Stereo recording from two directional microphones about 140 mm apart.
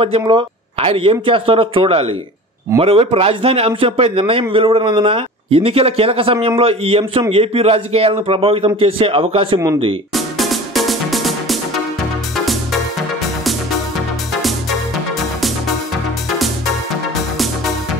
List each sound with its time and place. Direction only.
0.0 s a man's voice: 35° right (ahead or behind)
10.1 s music: centre (ahead or behind)